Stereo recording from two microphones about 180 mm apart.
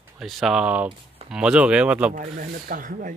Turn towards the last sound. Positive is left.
turn(degrees=-50)  # may be behind; listen again after turning